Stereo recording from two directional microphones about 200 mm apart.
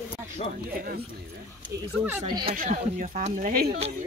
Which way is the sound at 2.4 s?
45° right (ahead or behind).